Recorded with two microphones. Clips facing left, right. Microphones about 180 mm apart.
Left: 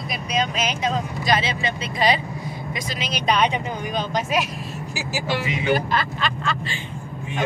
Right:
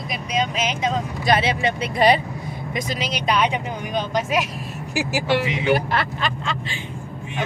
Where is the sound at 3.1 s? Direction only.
10° right (ahead or behind).